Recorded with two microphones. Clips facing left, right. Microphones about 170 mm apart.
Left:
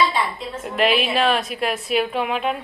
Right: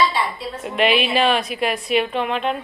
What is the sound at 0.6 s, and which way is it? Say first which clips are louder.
A woman's voice: right 1 dB; centre (ahead or behind).